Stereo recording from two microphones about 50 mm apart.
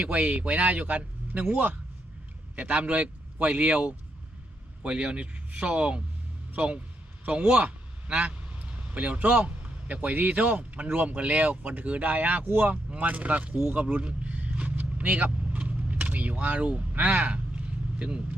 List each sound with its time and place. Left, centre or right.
0.0 s speech: right
7.3 s a man's voice: right
13.7 s vehicle: right